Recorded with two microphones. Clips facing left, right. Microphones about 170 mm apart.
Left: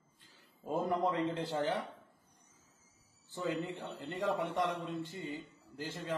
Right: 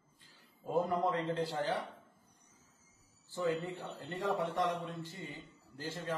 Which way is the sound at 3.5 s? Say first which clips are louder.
Right 1 dB; 20° left (ahead or behind).